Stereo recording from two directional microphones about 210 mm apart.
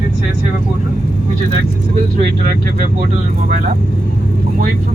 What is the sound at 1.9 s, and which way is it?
Vehicle, 35° right (ahead or behind).